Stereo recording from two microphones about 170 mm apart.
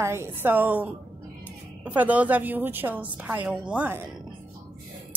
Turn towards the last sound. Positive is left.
turn(degrees=-10)  # may be behind; listen again after turning